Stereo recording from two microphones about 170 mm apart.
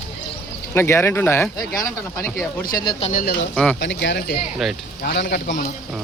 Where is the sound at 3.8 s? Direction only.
90° left.